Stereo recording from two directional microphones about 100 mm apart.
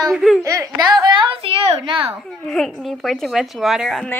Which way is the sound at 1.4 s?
60° right (ahead or behind).